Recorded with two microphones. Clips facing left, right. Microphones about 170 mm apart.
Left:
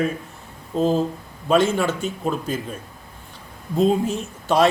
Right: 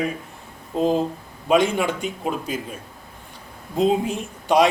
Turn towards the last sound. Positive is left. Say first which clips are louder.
# even
turn(degrees=-15)  # may be behind; listen again after turning